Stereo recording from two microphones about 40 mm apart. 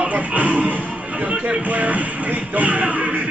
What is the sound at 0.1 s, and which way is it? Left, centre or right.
Music, right.